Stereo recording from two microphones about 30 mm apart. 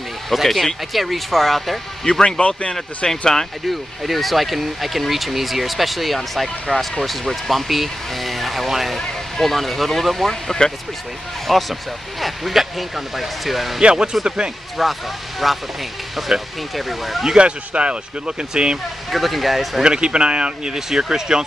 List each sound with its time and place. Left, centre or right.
0.3 s speech: centre
2.1 s speech: left
3.1 s speech: centre
3.6 s speech: centre
8.9 s speech: centre
13.8 s speech: right
14.8 s speech: centre
17.4 s speech: right
19.0 s speech: centre
19.8 s speech: right